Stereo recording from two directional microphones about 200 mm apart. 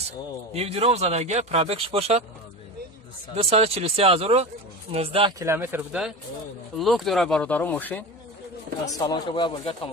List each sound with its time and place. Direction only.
0.0 s speech: 30° right (ahead or behind)
3.4 s speech: 30° right (ahead or behind)
5.4 s speech: 10° right (ahead or behind); by 9.8 s 25° left (ahead or behind)